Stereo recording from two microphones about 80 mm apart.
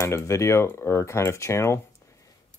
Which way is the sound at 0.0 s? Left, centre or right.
Left.